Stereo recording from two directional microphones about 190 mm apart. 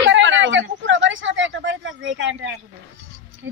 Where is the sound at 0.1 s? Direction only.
75° right (ahead or behind).